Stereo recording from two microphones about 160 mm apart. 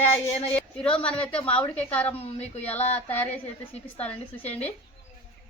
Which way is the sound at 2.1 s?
40° left (ahead or behind).